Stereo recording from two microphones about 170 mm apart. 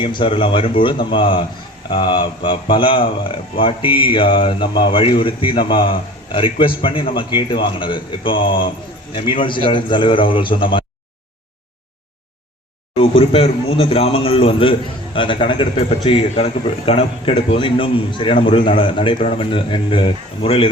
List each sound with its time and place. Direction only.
0.0 s a man's voice: 30° left (ahead or behind)
13.0 s speech: 35° left (ahead or behind)